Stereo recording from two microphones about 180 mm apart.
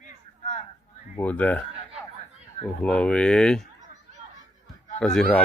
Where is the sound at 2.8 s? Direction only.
5° left (ahead or behind).